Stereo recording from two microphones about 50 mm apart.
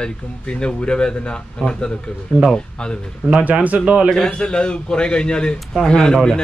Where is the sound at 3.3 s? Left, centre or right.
Right.